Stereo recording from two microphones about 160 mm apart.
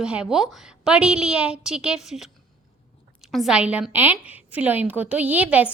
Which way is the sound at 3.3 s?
5° right (ahead or behind).